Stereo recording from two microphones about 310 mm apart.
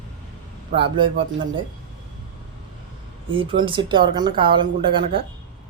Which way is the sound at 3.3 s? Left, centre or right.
Centre.